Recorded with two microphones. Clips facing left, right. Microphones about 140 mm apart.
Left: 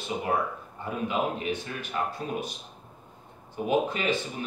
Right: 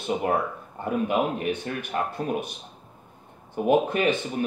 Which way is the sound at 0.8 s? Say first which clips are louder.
Right 5 dB; 55° right (ahead or behind).